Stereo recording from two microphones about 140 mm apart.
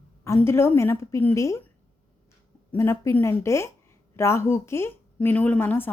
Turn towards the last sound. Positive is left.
turn(degrees=15)  # may be behind; listen again after turning